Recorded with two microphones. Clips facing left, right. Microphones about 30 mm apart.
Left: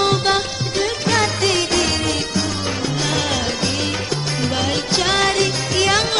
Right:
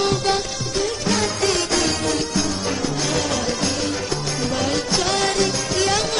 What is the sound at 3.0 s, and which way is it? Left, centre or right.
Music, left.